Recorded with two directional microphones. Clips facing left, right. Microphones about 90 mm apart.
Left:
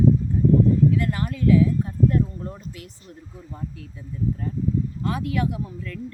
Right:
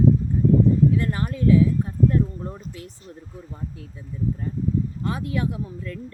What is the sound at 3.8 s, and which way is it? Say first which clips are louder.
Speech: even; 30° right (ahead or behind).